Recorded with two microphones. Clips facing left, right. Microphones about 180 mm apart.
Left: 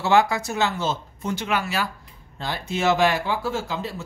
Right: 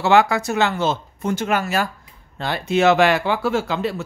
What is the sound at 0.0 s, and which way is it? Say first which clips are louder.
Speech: right 3 dB; 70° right (ahead or behind).